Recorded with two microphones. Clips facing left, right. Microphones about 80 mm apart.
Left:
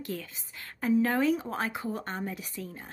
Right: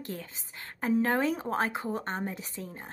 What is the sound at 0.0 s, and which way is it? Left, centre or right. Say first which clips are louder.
A woman's voice: left 2 dB; right.